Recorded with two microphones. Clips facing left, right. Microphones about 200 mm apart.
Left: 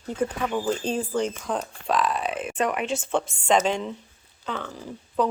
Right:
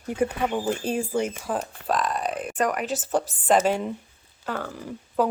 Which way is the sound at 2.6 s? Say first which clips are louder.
Right 1 dB; 40° right (ahead or behind).